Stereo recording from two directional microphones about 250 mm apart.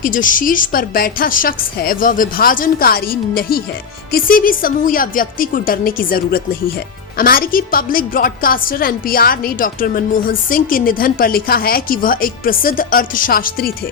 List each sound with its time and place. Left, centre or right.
0.0 s a woman's voice: left